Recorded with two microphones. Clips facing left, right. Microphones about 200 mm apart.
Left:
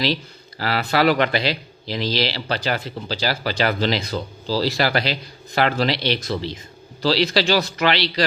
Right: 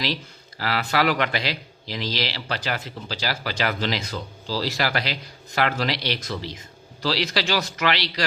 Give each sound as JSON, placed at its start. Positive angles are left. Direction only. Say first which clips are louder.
{"t": 0.6, "sound": "a man's voice", "louder": "left 4 dB", "side_deg": 30}